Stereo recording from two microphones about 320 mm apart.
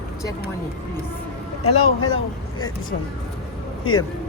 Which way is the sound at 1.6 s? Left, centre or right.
Left.